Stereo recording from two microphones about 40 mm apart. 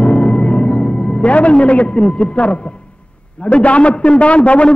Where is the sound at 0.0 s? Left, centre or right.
Left.